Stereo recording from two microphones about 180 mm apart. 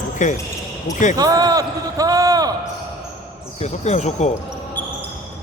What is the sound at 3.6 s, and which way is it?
Speech, 40° left (ahead or behind).